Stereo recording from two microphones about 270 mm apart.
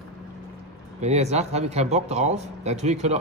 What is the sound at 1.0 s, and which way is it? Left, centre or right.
Speech, right.